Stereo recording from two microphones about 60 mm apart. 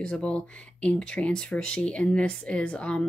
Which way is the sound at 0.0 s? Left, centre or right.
Centre.